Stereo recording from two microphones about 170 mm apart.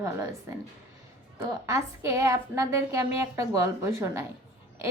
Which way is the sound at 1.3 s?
15° right (ahead or behind).